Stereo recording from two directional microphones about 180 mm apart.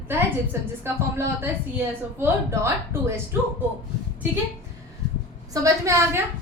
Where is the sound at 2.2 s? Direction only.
15° right (ahead or behind).